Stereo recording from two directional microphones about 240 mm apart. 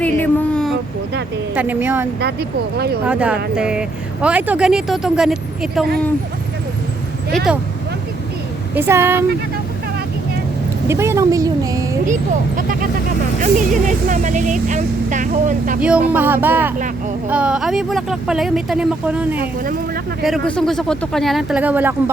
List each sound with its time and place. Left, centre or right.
0.0 s a sound: centre
1.5 s speech: centre
2.2 s speech: right
3.1 s speech: centre
7.3 s speech: centre
8.7 s speech: centre
10.8 s speech: centre
12.5 s vehicle: right
13.4 s speech: right
16.1 s speech: centre
19.4 s speech: right
20.2 s speech: centre